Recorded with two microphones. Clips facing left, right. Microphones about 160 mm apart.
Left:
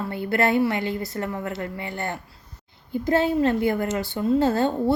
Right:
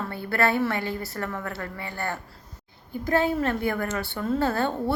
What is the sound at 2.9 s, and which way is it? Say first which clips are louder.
A woman's voice: left 3 dB; 20° left (ahead or behind).